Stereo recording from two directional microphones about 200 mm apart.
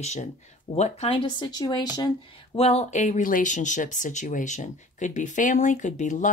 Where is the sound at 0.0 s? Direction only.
35° left (ahead or behind).